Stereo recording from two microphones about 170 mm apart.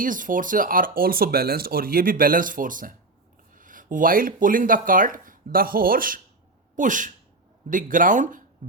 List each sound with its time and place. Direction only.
0.0 s speech: 50° right (ahead or behind)